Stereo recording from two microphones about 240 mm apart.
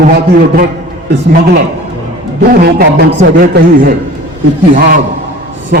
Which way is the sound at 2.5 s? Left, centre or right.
Right.